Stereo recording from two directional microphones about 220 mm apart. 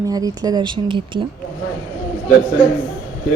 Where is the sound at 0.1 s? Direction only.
15° right (ahead or behind).